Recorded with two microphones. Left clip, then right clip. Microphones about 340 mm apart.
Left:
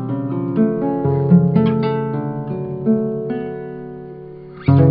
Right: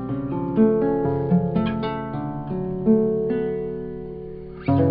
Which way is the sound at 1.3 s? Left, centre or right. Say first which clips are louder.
Left 7 dB; left.